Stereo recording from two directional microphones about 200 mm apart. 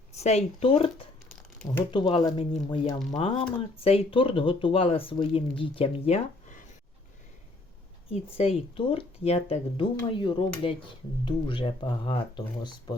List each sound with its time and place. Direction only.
0.2 s speech: 30° left (ahead or behind)
1.9 s speech: 25° left (ahead or behind)
8.1 s speech: 30° left (ahead or behind)